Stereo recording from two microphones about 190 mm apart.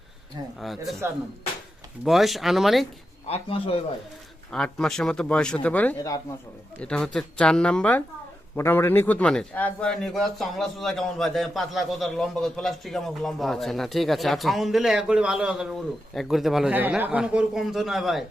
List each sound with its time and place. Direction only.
0.6 s a man's voice: centre (ahead or behind)
2.0 s a man's voice: centre (ahead or behind)
3.2 s a man's voice: 30° left (ahead or behind)
4.5 s a man's voice: 5° left (ahead or behind)